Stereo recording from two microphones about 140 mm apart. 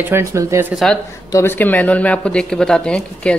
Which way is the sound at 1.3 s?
15° left (ahead or behind).